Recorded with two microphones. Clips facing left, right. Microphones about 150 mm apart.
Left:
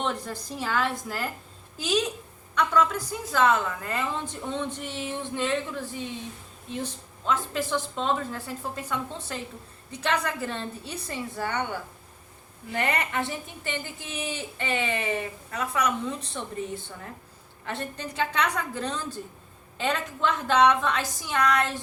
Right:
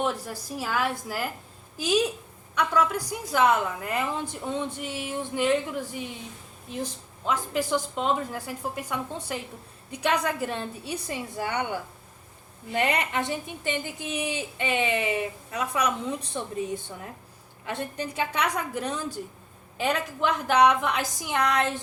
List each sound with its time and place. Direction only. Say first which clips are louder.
0.0 s a woman's voice: right 2 dB; 10° right (ahead or behind)
2.6 s a woman's voice: left 1 dB; 10° right (ahead or behind)
7.3 s a woman's voice: right 1 dB; 15° right (ahead or behind)